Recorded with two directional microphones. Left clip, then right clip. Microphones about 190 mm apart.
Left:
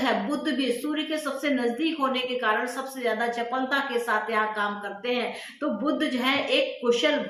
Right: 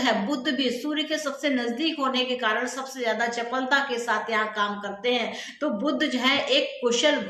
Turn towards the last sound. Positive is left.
turn(degrees=-20)  # may be behind; listen again after turning